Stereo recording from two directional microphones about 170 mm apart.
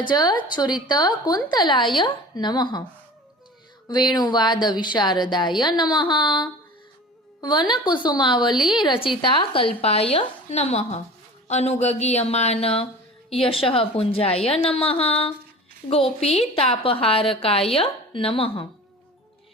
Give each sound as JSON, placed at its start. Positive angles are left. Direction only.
{"t": 0.0, "sound": "speech", "side_deg": 25}
{"t": 3.8, "sound": "a woman's voice", "side_deg": 25}